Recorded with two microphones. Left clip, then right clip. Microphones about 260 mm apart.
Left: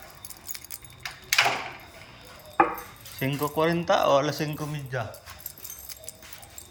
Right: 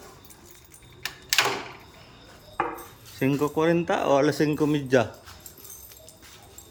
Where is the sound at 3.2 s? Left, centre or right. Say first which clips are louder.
Right 2 dB; centre.